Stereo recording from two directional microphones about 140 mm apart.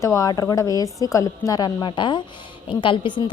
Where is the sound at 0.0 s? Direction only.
20° left (ahead or behind).